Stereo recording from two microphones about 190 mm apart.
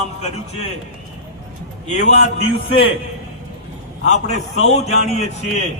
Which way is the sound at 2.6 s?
30° left (ahead or behind).